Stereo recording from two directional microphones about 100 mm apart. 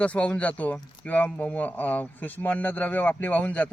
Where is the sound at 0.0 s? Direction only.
15° left (ahead or behind).